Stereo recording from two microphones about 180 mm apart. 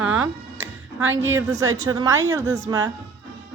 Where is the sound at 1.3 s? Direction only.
15° right (ahead or behind).